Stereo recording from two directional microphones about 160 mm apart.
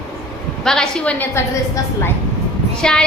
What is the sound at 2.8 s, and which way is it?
Speech, 5° left (ahead or behind).